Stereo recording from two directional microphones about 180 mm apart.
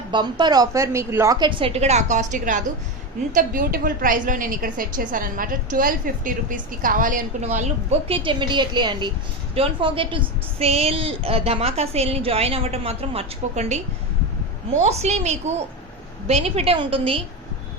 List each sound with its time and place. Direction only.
0.1 s a woman's voice: 25° right (ahead or behind)